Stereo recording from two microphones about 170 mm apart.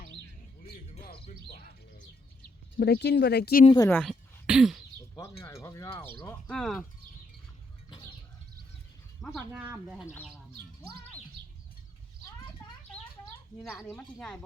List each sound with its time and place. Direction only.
2.7 s speech: 70° left (ahead or behind)
3.8 s speech: 5° left (ahead or behind)
5.4 s speech: 15° left (ahead or behind)
7.9 s bird: 30° left (ahead or behind)
9.5 s speech: 10° right (ahead or behind)
13.8 s speech: 5° left (ahead or behind)